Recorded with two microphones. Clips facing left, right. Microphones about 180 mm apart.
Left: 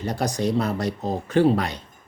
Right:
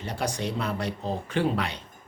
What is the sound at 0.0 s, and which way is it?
Speech, 40° left (ahead or behind).